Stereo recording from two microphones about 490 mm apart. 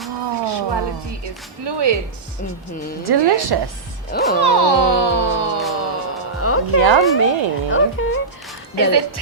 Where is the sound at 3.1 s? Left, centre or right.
Right.